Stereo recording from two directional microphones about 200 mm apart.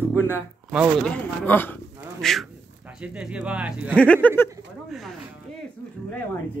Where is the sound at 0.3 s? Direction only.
5° right (ahead or behind).